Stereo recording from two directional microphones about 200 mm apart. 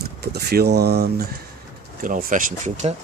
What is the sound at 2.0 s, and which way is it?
Speech, 40° right (ahead or behind).